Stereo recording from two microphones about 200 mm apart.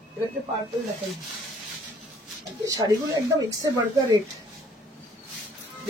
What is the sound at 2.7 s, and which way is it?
Speech, 15° right (ahead or behind).